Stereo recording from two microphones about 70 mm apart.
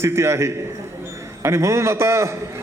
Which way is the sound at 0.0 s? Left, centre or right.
Right.